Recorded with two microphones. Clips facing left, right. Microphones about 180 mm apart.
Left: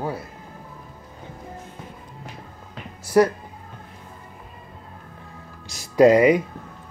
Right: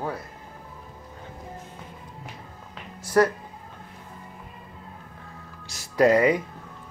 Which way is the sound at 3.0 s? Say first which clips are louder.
Left 3 dB; 10° left (ahead or behind).